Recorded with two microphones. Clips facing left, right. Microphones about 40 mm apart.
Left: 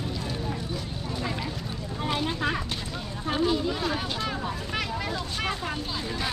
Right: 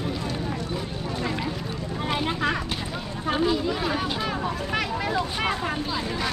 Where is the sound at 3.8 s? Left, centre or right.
Centre.